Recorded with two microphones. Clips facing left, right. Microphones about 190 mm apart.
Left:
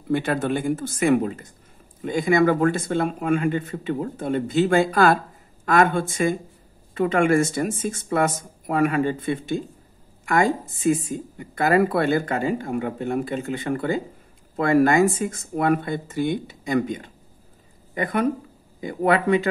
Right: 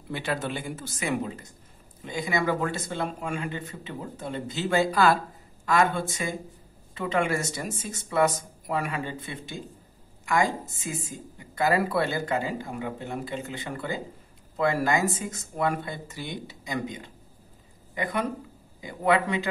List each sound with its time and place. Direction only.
0.1 s speech: 50° left (ahead or behind)